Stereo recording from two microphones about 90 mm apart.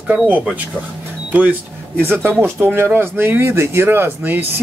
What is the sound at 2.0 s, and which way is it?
Speech, 25° right (ahead or behind).